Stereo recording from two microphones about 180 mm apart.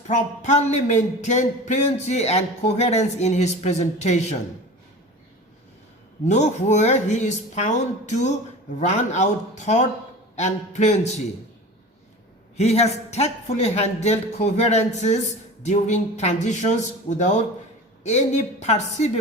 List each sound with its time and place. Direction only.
0.1 s speech: 40° left (ahead or behind)
6.2 s speech: 40° left (ahead or behind)
12.5 s speech: 35° left (ahead or behind)